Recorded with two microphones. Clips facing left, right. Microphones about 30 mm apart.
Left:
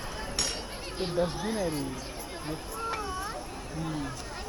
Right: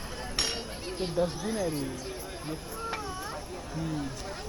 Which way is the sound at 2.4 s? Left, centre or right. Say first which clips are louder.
Left 3 dB; centre.